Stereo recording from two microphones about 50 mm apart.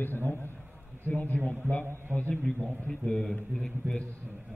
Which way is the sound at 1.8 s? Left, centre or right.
Right.